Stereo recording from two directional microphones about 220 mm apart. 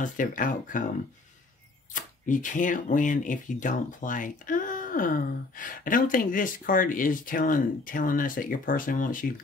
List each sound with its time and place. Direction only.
0.0 s speech: 35° left (ahead or behind)
2.2 s speech: 35° left (ahead or behind)